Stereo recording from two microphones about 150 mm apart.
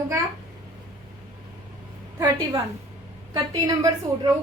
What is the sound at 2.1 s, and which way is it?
Speech, 15° right (ahead or behind).